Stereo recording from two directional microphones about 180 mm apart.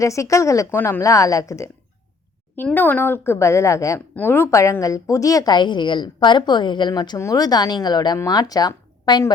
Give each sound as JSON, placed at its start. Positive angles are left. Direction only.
{"t": 0.0, "sound": "a woman's voice", "side_deg": 15}